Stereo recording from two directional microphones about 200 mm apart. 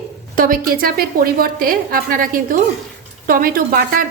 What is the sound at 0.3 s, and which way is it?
A woman's voice, 45° right (ahead or behind).